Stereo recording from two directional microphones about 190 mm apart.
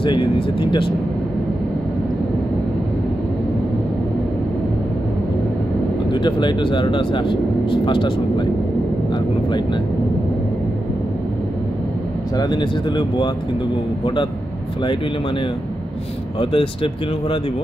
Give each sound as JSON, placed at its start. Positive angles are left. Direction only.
{"t": 0.0, "sound": "speech", "side_deg": 25}
{"t": 6.1, "sound": "speech", "side_deg": 25}
{"t": 12.4, "sound": "speech", "side_deg": 25}
{"t": 16.3, "sound": "speech", "side_deg": 25}